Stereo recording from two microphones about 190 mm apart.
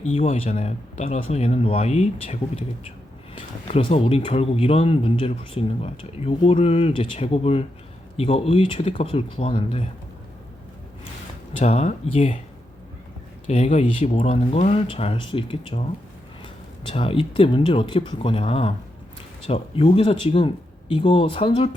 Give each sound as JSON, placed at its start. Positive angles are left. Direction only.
{"t": 0.0, "sound": "speech", "side_deg": 35}
{"t": 11.6, "sound": "speech", "side_deg": 35}
{"t": 13.5, "sound": "speech", "side_deg": 35}